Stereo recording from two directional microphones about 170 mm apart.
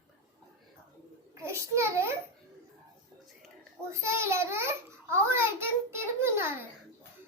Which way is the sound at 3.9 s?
15° right (ahead or behind).